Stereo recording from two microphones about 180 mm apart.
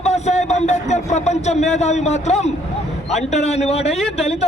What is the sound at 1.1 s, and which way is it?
A man's voice, 40° left (ahead or behind).